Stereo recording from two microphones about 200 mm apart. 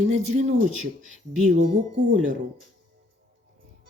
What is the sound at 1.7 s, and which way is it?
Speech, 40° right (ahead or behind).